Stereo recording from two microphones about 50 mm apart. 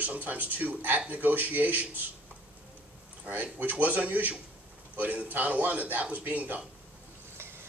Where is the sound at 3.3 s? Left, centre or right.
Right.